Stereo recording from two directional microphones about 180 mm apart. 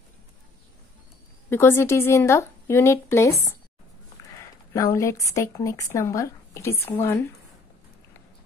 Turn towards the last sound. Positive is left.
turn(degrees=15)  # may be behind; listen again after turning